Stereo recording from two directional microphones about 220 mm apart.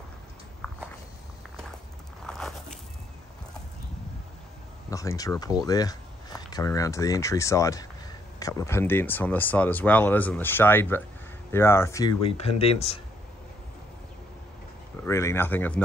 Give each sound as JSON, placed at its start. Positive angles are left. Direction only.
{"t": 2.2, "sound": "biting", "side_deg": 0}
{"t": 4.9, "sound": "speech", "side_deg": 15}
{"t": 15.0, "sound": "speech", "side_deg": 15}